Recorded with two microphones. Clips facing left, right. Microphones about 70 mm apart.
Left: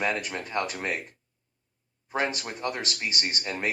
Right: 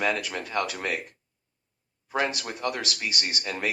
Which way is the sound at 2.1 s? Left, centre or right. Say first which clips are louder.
Right 1 dB; left.